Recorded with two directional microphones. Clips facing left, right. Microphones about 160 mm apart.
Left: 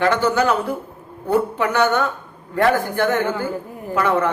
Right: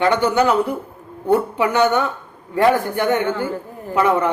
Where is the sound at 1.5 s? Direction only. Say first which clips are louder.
Right 2 dB; 15° right (ahead or behind).